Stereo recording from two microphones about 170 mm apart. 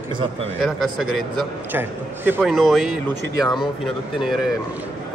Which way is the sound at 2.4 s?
Centre (ahead or behind).